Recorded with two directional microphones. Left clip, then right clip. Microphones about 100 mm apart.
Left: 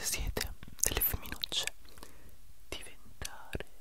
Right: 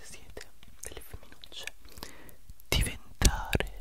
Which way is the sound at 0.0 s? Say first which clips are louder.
Left 11 dB; 30° left (ahead or behind).